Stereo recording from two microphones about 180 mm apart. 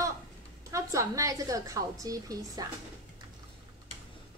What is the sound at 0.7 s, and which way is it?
A woman's voice, 15° right (ahead or behind).